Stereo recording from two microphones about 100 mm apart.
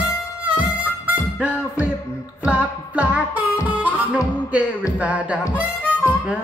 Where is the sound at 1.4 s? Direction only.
15° right (ahead or behind).